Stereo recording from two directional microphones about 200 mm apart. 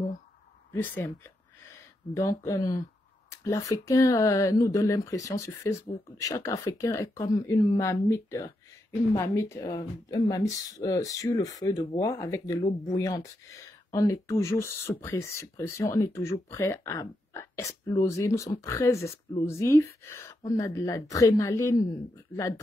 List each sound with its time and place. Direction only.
0.7 s speech: 10° left (ahead or behind)
2.1 s speech: 15° left (ahead or behind)